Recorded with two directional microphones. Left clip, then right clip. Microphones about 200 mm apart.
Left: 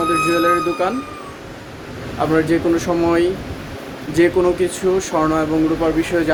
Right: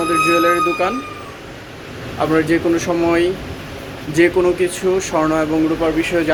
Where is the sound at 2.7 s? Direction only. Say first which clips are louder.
Even; 15° left (ahead or behind).